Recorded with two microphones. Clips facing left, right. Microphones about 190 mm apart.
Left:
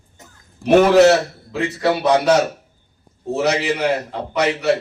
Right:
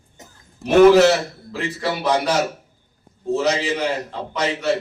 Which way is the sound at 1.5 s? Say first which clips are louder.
Left 6 dB; 65° left (ahead or behind).